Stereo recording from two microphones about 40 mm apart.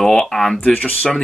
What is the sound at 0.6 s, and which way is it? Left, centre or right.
Speech, left.